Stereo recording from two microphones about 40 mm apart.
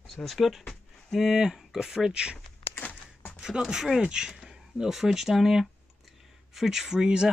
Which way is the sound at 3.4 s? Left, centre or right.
Centre.